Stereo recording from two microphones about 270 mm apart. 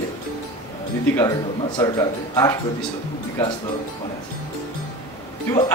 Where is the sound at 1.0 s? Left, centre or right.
Centre.